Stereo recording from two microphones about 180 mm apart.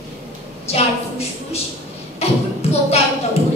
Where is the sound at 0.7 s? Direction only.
35° left (ahead or behind).